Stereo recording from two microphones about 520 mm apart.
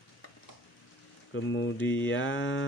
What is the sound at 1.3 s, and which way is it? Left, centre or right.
Speech, left.